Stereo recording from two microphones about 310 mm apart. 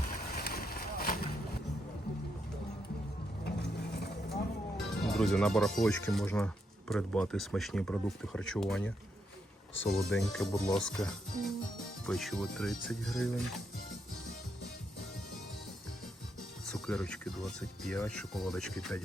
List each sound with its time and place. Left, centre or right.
0.1 s vehicle: left
3.4 s vehicle: left
4.9 s speech: centre
10.1 s speech: centre
16.6 s speech: centre